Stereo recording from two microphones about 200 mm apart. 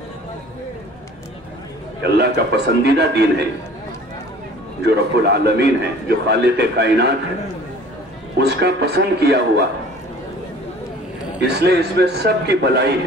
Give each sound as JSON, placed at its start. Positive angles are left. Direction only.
{"t": 2.0, "sound": "a man's voice", "side_deg": -55}
{"t": 4.8, "sound": "a man's voice", "side_deg": -55}
{"t": 8.4, "sound": "a man's voice", "side_deg": -55}
{"t": 11.3, "sound": "a man's voice", "side_deg": -55}